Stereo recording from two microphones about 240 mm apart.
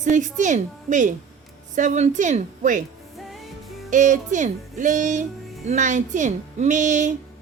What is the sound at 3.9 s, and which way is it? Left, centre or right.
Speech, right.